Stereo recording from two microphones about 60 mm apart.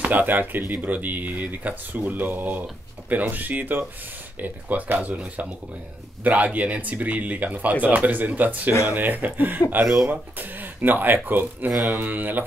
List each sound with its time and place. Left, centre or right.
0.0 s speech: right
11.7 s mantra: centre
12.0 s speech: right